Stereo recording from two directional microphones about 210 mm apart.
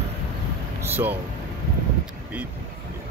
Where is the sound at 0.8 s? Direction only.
10° right (ahead or behind).